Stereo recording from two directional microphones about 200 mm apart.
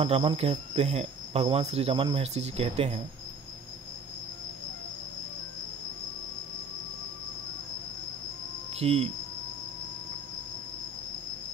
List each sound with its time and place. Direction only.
0.0 s speech: 30° right (ahead or behind)
8.7 s speech: 30° right (ahead or behind)